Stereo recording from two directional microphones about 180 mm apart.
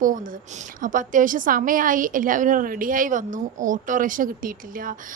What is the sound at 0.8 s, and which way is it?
A woman's voice, 50° right (ahead or behind).